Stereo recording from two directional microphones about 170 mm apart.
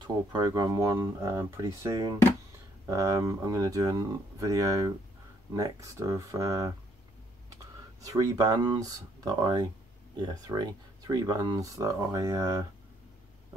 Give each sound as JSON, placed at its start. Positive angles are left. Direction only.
{"t": 0.0, "sound": "speech", "side_deg": -25}
{"t": 8.0, "sound": "speech", "side_deg": -20}